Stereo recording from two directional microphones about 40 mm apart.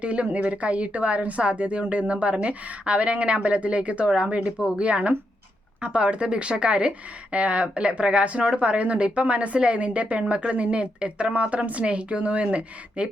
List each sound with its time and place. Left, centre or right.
0.0 s speech: right